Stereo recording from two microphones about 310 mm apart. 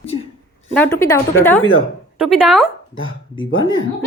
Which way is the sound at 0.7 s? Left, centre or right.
Centre.